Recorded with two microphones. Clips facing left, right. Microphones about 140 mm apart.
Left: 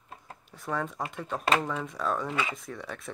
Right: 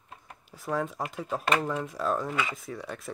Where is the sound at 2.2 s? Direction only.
20° left (ahead or behind).